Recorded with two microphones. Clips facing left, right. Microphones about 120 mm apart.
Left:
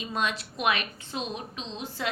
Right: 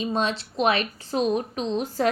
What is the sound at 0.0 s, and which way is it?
A woman's voice, 30° right (ahead or behind).